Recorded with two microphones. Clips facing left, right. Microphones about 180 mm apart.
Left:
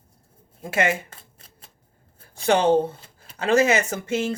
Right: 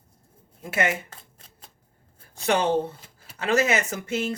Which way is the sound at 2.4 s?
30° left (ahead or behind).